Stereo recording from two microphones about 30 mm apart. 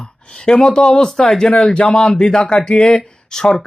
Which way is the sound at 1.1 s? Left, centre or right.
Centre.